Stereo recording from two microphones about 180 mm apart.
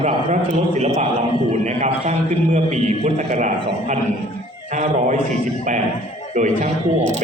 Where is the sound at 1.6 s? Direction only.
40° right (ahead or behind).